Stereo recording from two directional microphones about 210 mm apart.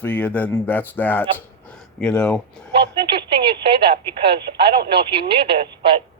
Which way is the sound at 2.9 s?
25° right (ahead or behind).